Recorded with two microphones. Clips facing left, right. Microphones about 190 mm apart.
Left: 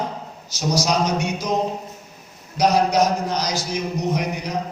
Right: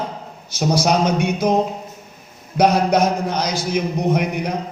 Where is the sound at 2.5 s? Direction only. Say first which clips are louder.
Right 2 dB; 55° right (ahead or behind).